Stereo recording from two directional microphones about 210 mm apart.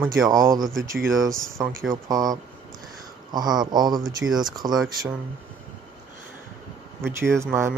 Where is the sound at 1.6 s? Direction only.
5° right (ahead or behind).